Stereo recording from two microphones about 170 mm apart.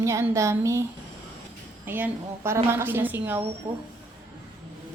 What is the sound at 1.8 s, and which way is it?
Speech, 10° right (ahead or behind).